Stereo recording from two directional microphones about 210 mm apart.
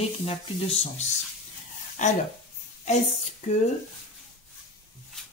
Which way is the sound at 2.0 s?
35° left (ahead or behind).